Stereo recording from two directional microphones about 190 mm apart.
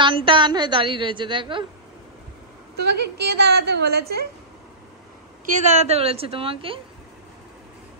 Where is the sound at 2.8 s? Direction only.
60° right (ahead or behind).